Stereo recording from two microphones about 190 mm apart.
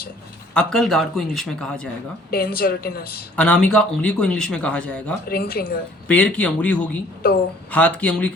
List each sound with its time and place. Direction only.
0.5 s speech: 5° left (ahead or behind)
2.3 s a woman's voice: 50° left (ahead or behind)
3.3 s speech: 5° left (ahead or behind)
5.3 s a woman's voice: 55° left (ahead or behind)
6.1 s speech: 5° left (ahead or behind)